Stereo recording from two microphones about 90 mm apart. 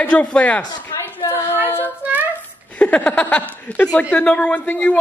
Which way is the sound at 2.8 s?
15° left (ahead or behind).